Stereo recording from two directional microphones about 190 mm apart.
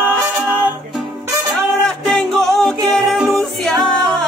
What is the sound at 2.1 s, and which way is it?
Music, centre (ahead or behind).